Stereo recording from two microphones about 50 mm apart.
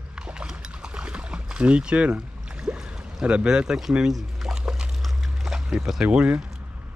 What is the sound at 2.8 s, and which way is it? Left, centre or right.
Speech, centre.